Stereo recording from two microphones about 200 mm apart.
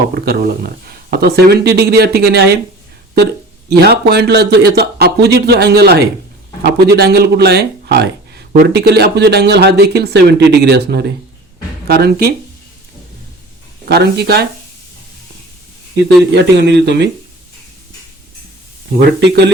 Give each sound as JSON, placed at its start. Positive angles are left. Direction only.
{"t": 0.1, "sound": "speech", "side_deg": -50}
{"t": 3.7, "sound": "a man's voice", "side_deg": -55}
{"t": 13.8, "sound": "speech", "side_deg": -55}
{"t": 16.0, "sound": "speech", "side_deg": -60}